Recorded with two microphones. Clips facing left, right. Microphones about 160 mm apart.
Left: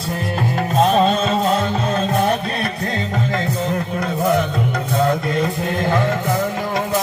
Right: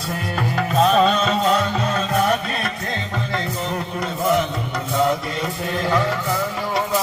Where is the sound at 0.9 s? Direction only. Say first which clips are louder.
Left 1 dB; 45° left (ahead or behind).